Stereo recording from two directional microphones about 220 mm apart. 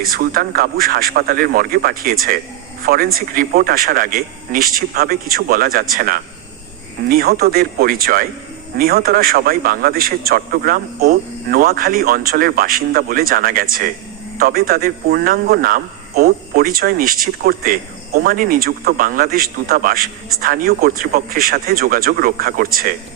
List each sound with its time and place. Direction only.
0.0 s a man's voice: 40° right (ahead or behind)